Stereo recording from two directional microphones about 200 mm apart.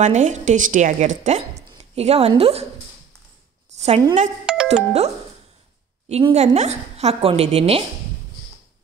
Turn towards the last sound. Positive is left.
turn(degrees=-30)  # may be behind; listen again after turning